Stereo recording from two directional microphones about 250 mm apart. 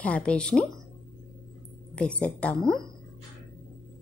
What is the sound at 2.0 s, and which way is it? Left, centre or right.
Speech, centre.